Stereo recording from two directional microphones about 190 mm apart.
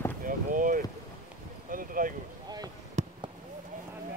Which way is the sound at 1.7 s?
45° right (ahead or behind).